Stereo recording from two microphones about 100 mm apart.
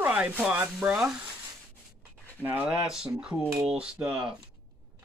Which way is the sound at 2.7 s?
5° right (ahead or behind).